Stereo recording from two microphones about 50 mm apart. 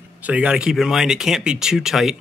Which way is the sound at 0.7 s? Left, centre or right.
Centre.